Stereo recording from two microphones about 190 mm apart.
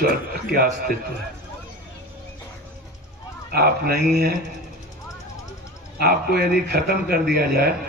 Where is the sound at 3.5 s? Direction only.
55° right (ahead or behind).